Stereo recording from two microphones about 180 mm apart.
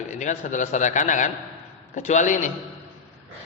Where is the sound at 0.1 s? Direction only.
45° left (ahead or behind).